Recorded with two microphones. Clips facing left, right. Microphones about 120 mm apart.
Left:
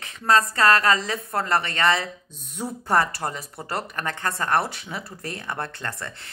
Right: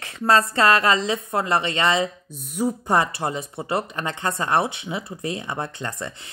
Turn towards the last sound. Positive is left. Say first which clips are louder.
# right 2 dB
turn(degrees=-15)  # may be behind; listen again after turning